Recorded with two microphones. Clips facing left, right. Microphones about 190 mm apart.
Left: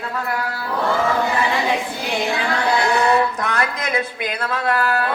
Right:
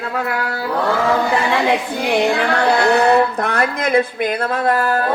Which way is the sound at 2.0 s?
60° right (ahead or behind).